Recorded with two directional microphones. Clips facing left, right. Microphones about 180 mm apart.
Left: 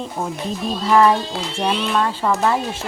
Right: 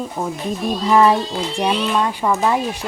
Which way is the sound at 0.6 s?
15° right (ahead or behind).